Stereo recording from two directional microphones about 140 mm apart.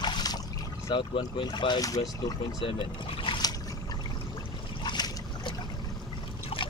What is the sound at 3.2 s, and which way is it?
Trickle, 35° left (ahead or behind).